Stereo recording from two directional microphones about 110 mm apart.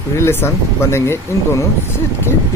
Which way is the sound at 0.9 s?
25° left (ahead or behind).